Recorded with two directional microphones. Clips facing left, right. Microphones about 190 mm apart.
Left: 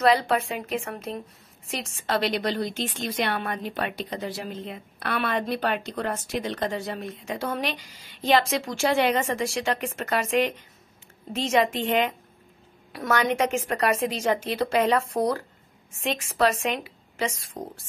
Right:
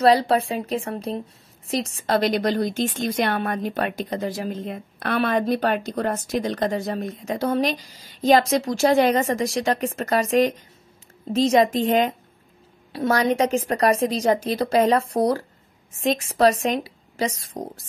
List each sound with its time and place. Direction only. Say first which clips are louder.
0.0 s a woman's voice: right 4 dB; 35° right (ahead or behind)